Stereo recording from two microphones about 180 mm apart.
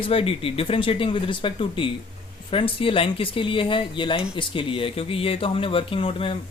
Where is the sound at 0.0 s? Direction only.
30° left (ahead or behind).